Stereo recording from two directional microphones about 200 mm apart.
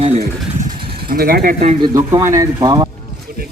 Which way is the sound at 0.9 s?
50° right (ahead or behind).